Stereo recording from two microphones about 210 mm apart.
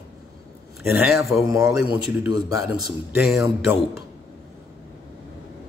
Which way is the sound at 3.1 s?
Centre (ahead or behind).